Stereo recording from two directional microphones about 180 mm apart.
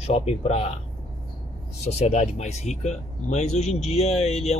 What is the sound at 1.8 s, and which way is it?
Speech, 40° left (ahead or behind).